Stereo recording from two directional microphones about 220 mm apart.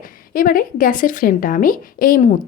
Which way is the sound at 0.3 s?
40° left (ahead or behind).